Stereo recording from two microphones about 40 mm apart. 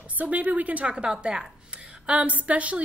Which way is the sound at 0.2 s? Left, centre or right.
Right.